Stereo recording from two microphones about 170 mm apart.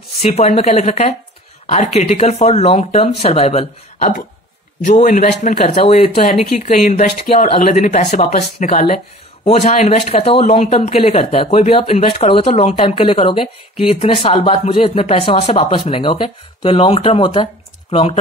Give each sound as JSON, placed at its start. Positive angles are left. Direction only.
{"t": 0.2, "sound": "speech", "side_deg": 40}
{"t": 4.8, "sound": "speech", "side_deg": 50}
{"t": 6.6, "sound": "speech", "side_deg": 50}